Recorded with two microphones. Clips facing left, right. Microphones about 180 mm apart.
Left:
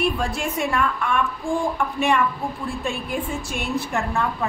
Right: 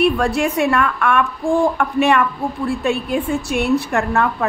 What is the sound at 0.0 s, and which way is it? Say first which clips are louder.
A woman's voice: right 7 dB; 70° right (ahead or behind).